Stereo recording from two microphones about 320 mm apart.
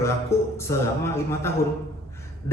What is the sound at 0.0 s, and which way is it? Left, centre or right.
A man's voice, centre.